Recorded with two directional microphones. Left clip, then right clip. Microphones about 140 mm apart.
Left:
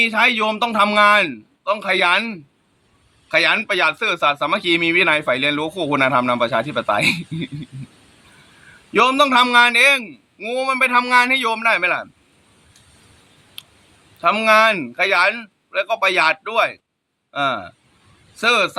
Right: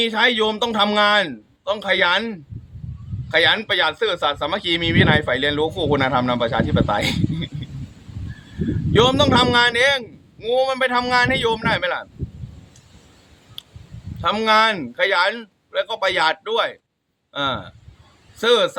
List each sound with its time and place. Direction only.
0.0 s a man's voice: 20° right (ahead or behind)
8.9 s a man's voice: 20° right (ahead or behind)
14.2 s a man's voice: 20° right (ahead or behind)